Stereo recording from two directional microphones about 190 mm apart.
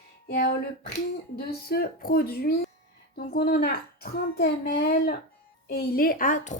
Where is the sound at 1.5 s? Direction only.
55° left (ahead or behind).